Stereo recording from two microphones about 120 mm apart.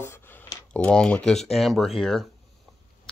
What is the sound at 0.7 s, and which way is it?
Speech, 10° left (ahead or behind).